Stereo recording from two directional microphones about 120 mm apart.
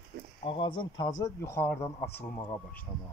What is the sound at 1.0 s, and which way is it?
Speech, 30° left (ahead or behind).